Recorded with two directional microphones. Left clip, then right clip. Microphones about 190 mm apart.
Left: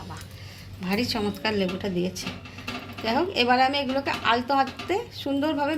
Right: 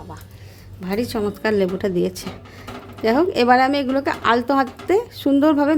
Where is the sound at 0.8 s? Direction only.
50° right (ahead or behind).